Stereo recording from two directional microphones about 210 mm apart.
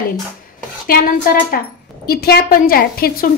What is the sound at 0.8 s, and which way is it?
A woman's voice, 45° left (ahead or behind).